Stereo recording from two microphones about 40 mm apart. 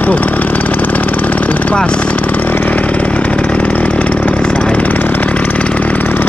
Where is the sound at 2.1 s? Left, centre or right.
Left.